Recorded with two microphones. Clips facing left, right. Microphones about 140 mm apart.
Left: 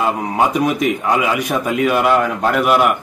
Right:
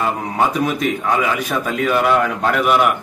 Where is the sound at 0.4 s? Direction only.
10° left (ahead or behind).